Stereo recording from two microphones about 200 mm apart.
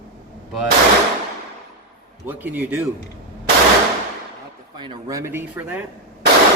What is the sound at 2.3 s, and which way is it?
Speech, 10° right (ahead or behind).